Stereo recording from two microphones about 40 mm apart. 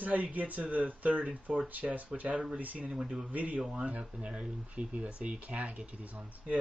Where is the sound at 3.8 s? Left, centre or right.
Right.